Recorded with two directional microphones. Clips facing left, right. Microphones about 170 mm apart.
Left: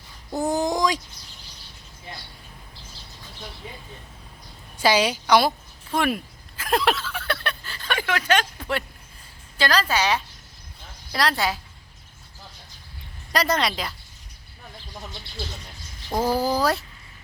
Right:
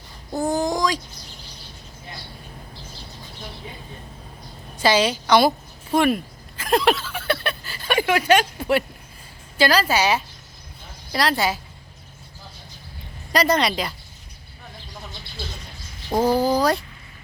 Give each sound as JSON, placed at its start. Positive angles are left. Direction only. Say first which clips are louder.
{"t": 0.5, "sound": "a sound", "louder": "even", "side_deg": 20}
{"t": 4.8, "sound": "a woman's voice", "louder": "right 1 dB", "side_deg": 10}
{"t": 5.9, "sound": "a sound", "louder": "right 5 dB", "side_deg": 0}
{"t": 9.6, "sound": "a woman's voice", "louder": "right 4 dB", "side_deg": -10}
{"t": 13.3, "sound": "a woman's voice", "louder": "right 4 dB", "side_deg": 0}
{"t": 16.2, "sound": "a woman's voice", "louder": "right 3 dB", "side_deg": 5}